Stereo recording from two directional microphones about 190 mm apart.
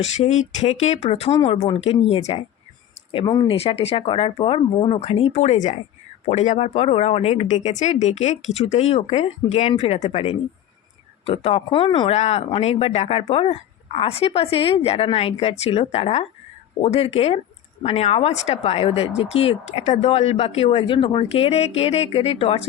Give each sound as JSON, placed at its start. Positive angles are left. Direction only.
{"t": 0.0, "sound": "speech", "side_deg": 40}